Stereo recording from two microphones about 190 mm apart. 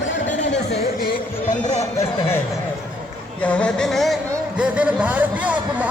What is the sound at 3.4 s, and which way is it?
Speech, 5° left (ahead or behind).